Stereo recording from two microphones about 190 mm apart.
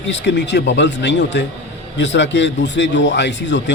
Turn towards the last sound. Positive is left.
turn(degrees=70)  # may be behind; listen again after turning